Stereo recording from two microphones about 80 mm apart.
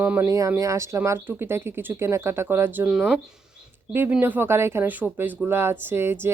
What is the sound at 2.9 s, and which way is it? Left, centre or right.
Speech, centre.